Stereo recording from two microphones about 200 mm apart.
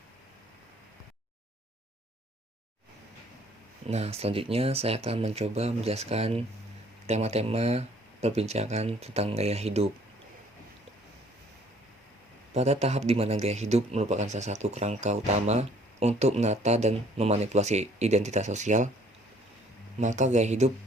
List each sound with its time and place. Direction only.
3.8 s a man's voice: 30° right (ahead or behind)
12.5 s a man's voice: 30° right (ahead or behind)
20.0 s a man's voice: 35° right (ahead or behind)